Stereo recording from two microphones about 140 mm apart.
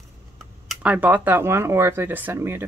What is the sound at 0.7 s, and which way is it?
Speech, 10° right (ahead or behind).